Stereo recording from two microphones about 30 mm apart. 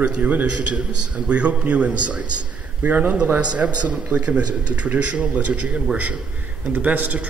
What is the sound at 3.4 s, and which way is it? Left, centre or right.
Speech, right.